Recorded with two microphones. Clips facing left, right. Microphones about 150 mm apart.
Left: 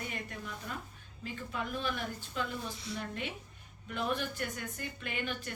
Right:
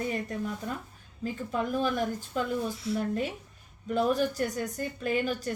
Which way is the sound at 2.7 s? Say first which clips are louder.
Right 10 dB; centre (ahead or behind).